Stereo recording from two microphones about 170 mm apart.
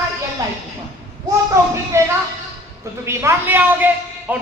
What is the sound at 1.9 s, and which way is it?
A man's voice, 15° right (ahead or behind).